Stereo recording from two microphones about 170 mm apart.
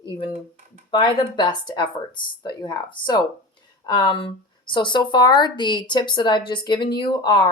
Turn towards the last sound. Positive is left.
turn(degrees=25)  # may be behind; listen again after turning